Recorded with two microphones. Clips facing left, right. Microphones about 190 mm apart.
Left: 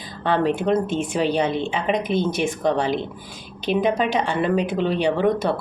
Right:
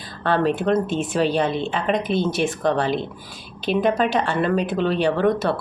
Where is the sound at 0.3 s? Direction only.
15° left (ahead or behind).